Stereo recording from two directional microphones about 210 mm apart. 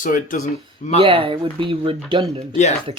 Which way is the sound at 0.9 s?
25° right (ahead or behind).